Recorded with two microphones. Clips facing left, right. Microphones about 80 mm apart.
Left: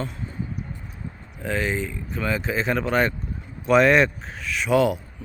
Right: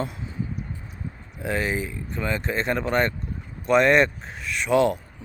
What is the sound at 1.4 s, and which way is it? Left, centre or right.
A man's voice, centre.